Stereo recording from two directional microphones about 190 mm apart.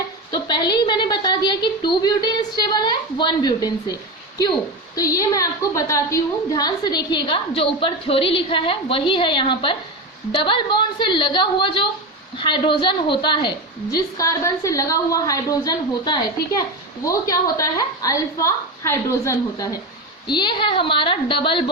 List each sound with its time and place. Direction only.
0.3 s a woman's voice: 25° left (ahead or behind)
4.9 s a woman's voice: 15° left (ahead or behind)